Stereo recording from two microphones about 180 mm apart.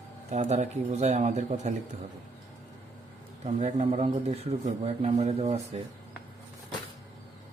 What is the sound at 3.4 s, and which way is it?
Speech, 35° right (ahead or behind).